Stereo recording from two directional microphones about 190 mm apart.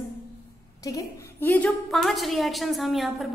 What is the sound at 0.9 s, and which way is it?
A woman's voice, 15° left (ahead or behind).